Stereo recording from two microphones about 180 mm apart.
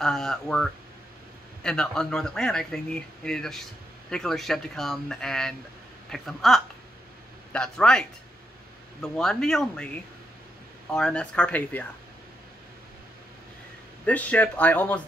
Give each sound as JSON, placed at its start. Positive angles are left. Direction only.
{"t": 0.0, "sound": "speech", "side_deg": 0}
{"t": 10.9, "sound": "speech", "side_deg": 5}
{"t": 14.0, "sound": "speech", "side_deg": 10}